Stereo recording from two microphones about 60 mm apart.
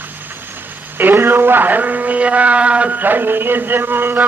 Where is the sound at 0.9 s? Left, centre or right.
Right.